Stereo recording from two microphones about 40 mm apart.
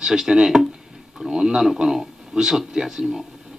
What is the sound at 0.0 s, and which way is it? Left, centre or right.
Speech, centre.